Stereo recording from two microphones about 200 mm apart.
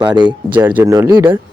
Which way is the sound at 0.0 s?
20° right (ahead or behind).